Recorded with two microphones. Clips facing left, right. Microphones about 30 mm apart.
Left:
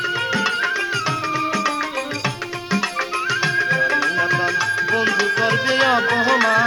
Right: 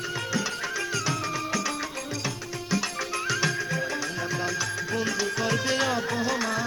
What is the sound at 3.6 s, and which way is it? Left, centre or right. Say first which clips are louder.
Music: left 11 dB; left.